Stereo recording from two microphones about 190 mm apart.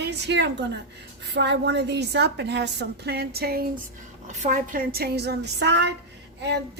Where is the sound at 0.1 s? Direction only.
65° right (ahead or behind).